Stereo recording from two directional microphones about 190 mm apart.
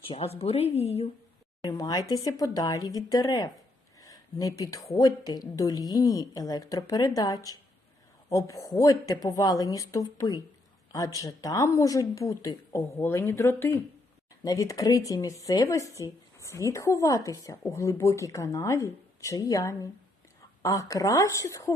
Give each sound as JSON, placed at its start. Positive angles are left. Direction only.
{"t": 0.1, "sound": "speech", "side_deg": 30}
{"t": 1.6, "sound": "a woman's voice", "side_deg": 20}